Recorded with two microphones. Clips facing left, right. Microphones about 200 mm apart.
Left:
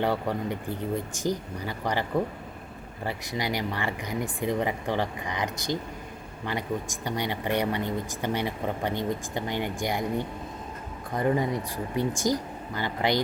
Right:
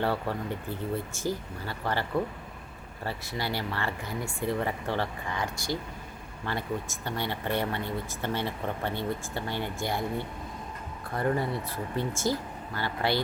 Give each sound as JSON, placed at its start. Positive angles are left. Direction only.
{"t": 0.0, "sound": "speech", "side_deg": 15}